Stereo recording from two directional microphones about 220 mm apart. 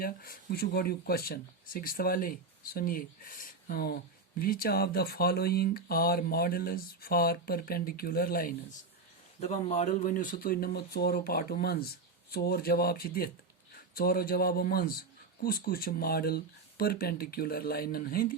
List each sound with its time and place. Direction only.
0.0 s speech: 45° left (ahead or behind)
9.4 s speech: 30° left (ahead or behind)